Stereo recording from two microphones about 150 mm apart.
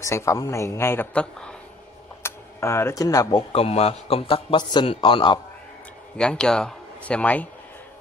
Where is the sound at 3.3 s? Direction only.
40° left (ahead or behind).